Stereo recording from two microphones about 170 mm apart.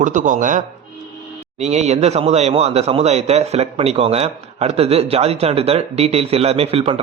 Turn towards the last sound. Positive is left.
turn(degrees=-35)  # may be behind; listen again after turning